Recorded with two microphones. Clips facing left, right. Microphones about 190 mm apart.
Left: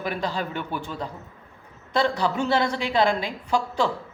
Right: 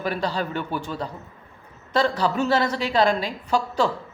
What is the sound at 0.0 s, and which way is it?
A woman's voice, 15° left (ahead or behind).